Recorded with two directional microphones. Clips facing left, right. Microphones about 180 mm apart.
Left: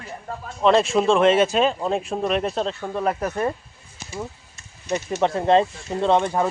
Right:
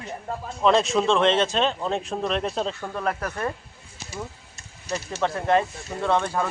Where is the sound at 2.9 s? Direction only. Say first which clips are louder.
Left 4 dB; 20° left (ahead or behind).